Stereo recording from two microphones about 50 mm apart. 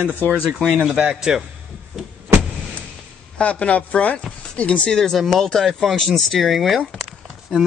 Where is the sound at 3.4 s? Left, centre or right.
Left.